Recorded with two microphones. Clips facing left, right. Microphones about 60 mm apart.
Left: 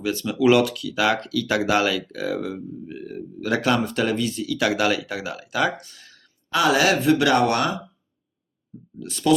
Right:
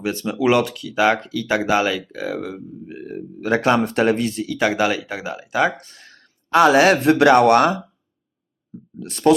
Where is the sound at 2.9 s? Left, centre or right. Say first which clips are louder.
Right 2 dB; right.